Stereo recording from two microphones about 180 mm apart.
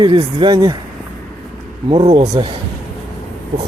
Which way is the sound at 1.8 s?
30° right (ahead or behind).